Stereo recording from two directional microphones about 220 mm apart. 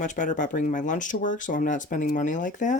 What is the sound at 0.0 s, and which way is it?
Speech, 35° left (ahead or behind).